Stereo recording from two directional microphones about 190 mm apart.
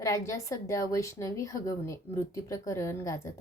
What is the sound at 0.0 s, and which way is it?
Speech, 15° left (ahead or behind).